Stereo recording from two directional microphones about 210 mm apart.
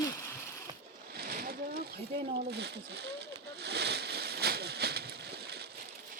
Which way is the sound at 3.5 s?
50° right (ahead or behind).